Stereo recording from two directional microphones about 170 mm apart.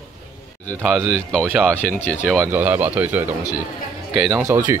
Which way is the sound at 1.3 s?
5° left (ahead or behind).